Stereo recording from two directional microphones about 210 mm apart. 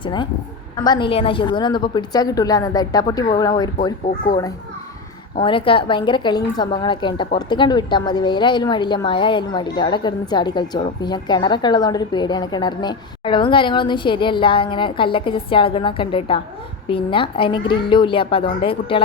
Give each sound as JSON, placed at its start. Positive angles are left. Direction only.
{"t": 0.0, "sound": "speech", "side_deg": 20}
{"t": 5.4, "sound": "speech", "side_deg": 25}